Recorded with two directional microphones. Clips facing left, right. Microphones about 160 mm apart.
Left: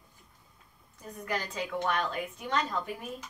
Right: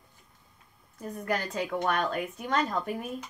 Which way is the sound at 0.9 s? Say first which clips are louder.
Right 4 dB; 50° right (ahead or behind).